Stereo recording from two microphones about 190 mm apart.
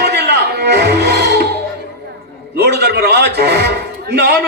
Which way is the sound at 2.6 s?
60° right (ahead or behind).